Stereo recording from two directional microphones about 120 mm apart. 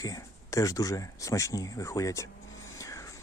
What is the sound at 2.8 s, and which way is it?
Vehicle, 30° left (ahead or behind).